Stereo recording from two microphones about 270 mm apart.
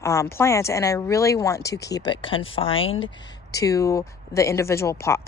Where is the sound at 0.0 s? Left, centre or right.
Centre.